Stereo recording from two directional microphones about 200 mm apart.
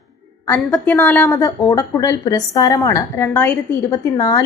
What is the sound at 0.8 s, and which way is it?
A woman's voice, 10° left (ahead or behind).